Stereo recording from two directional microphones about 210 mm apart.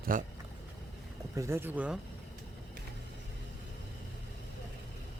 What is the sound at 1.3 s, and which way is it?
Speech, 15° right (ahead or behind).